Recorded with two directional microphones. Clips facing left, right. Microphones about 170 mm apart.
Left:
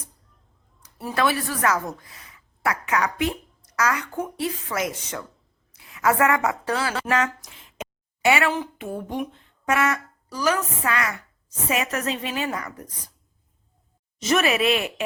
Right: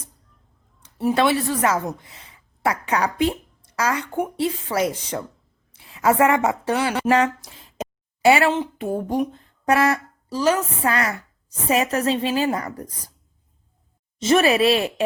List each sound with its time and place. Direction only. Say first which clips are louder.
0.8 s a woman's voice: right 5 dB; 25° right (ahead or behind)
8.8 s a woman's voice: right 6 dB; 40° right (ahead or behind)
14.2 s a woman's voice: right 5 dB; 30° right (ahead or behind)